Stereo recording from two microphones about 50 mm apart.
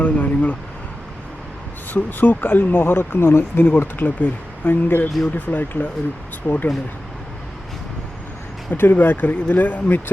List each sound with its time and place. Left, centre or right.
0.0 s speech: left
1.9 s speech: left
8.7 s speech: left